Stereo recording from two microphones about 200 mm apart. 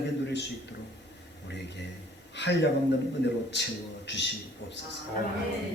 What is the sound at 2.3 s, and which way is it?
A man's voice, 60° left (ahead or behind).